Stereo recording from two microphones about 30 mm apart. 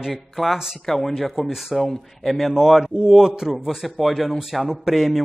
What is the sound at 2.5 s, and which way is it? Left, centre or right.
Speech, centre.